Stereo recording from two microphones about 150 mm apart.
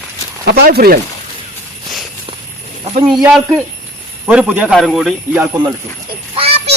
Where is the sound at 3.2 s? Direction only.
5° right (ahead or behind).